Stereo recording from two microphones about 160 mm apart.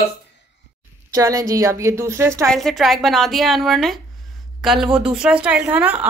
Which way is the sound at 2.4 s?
Centre (ahead or behind).